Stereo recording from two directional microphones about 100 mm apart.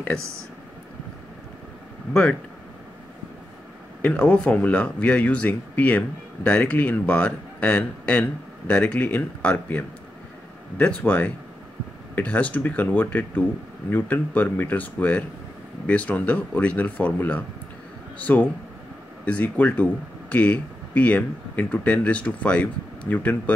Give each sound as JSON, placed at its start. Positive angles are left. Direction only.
{"t": 4.0, "sound": "speech", "side_deg": 15}